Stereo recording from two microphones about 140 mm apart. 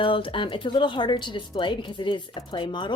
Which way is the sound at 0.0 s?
40° left (ahead or behind).